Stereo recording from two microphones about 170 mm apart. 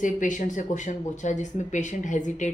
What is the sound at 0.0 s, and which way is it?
Speech, 50° left (ahead or behind).